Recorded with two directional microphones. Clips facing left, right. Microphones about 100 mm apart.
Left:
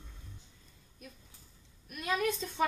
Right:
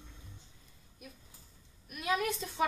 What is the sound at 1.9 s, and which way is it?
Speech, 5° right (ahead or behind).